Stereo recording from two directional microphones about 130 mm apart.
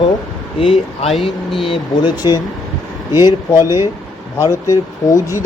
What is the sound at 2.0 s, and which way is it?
Speech, 30° left (ahead or behind).